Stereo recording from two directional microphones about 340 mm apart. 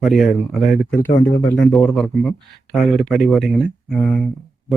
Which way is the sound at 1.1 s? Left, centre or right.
Left.